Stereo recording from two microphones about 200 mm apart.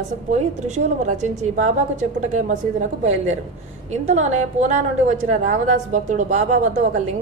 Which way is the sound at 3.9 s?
35° right (ahead or behind).